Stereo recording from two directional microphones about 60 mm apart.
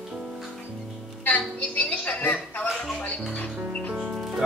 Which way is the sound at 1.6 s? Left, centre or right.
Left.